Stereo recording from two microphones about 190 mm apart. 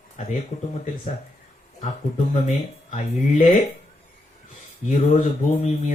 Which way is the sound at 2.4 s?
40° left (ahead or behind).